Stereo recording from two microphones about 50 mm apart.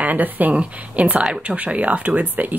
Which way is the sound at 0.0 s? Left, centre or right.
Right.